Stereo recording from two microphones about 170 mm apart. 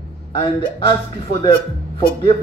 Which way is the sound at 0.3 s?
30° left (ahead or behind).